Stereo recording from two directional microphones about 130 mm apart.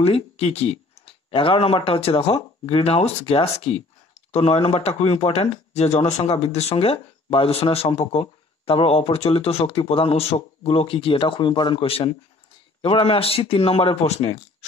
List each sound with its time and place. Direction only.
0.0 s speech: 50° left (ahead or behind)